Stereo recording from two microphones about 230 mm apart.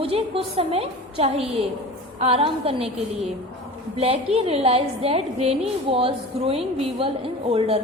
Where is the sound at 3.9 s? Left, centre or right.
Right.